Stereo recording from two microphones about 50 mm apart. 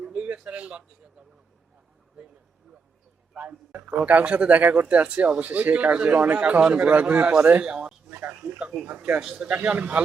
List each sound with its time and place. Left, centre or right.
0.0 s a sound: right
0.4 s speech: right
3.3 s speech: right
6.4 s a man's voice: right
8.1 s speech: right
9.2 s speech: centre
9.5 s a man's voice: right